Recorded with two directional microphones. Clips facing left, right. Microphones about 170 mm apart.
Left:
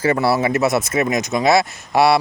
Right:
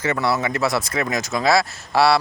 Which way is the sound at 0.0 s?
30° left (ahead or behind).